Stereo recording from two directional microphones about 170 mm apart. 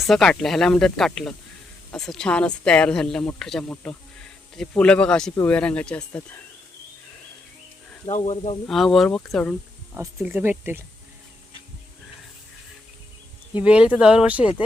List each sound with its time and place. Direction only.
0.0 s speech: centre (ahead or behind)
8.1 s speech: 40° left (ahead or behind)
8.6 s speech: centre (ahead or behind)
9.9 s speech: 10° right (ahead or behind)
13.6 s speech: 5° right (ahead or behind)